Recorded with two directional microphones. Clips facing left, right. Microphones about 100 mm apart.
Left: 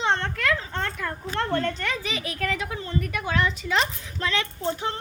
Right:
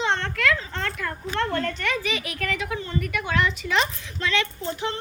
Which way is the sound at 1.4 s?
30° left (ahead or behind).